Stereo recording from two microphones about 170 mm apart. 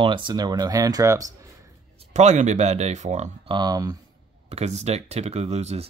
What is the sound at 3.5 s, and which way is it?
Speech, 25° right (ahead or behind).